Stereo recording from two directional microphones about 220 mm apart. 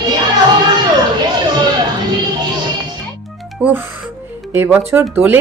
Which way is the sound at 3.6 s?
5° right (ahead or behind).